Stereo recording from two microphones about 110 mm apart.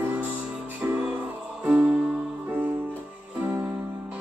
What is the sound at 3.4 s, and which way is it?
Music, 15° right (ahead or behind).